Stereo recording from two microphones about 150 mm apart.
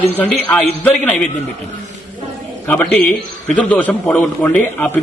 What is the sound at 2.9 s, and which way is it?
A man's voice, 5° left (ahead or behind).